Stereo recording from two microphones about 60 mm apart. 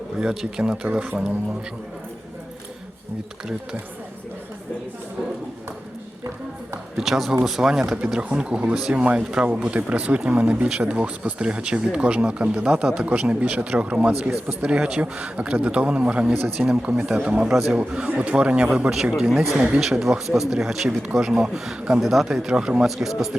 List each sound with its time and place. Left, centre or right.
0.2 s speech: centre
6.9 s speech: centre
9.0 s a man's voice: centre
17.5 s speech: centre
17.7 s a man's voice: right; by 23.4 s centre